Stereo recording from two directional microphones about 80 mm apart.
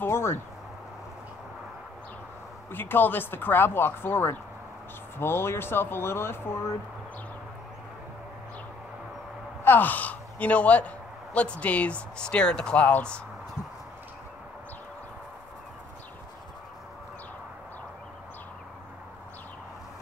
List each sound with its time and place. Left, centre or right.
0.0 s speech: left
2.7 s speech: left
9.7 s speech: left